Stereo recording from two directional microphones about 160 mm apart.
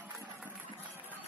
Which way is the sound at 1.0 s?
10° right (ahead or behind).